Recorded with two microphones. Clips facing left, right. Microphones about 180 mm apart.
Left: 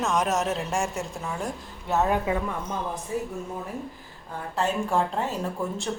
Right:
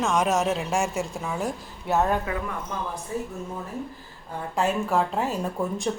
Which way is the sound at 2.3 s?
20° left (ahead or behind).